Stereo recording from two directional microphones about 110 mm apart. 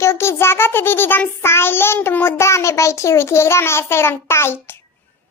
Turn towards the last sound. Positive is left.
turn(degrees=20)  # may be behind; listen again after turning